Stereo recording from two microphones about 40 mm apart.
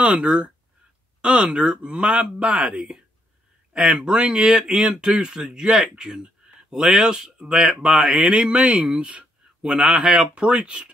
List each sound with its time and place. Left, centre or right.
0.0 s a man's voice: right
3.7 s a man's voice: right
9.1 s a sound: right
9.8 s a man's voice: right